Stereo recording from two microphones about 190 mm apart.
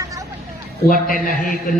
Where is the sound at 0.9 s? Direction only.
45° left (ahead or behind).